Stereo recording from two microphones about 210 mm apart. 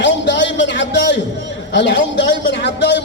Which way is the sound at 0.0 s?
55° left (ahead or behind).